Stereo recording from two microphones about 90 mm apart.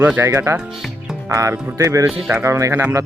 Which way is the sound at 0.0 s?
20° right (ahead or behind).